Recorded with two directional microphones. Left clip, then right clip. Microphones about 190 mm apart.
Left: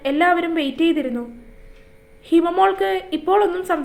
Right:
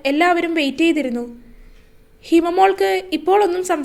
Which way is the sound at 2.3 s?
40° right (ahead or behind).